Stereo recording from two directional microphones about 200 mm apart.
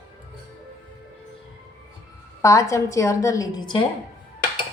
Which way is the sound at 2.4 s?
15° left (ahead or behind).